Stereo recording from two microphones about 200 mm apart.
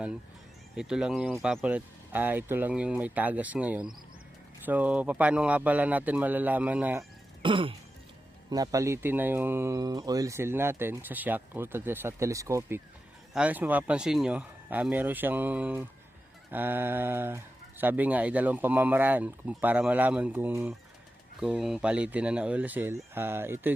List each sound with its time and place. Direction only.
0.8 s speech: 5° right (ahead or behind)
7.4 s music: 25° right (ahead or behind)
8.4 s speech: 20° right (ahead or behind)